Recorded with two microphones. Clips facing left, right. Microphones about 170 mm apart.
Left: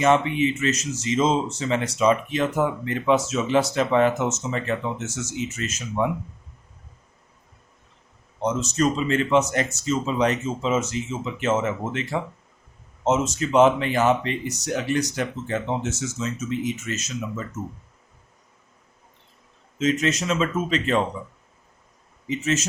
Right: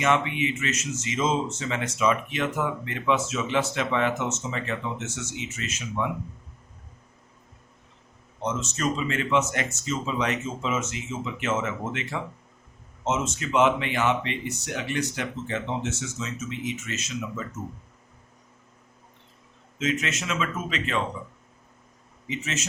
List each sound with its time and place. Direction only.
0.0 s speech: 35° left (ahead or behind)
8.4 s speech: 35° left (ahead or behind)
19.8 s speech: 35° left (ahead or behind)
22.3 s speech: 40° left (ahead or behind)